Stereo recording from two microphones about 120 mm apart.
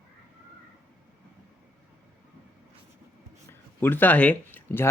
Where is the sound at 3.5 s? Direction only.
20° left (ahead or behind).